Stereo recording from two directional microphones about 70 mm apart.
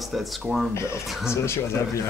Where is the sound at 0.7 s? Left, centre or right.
Left.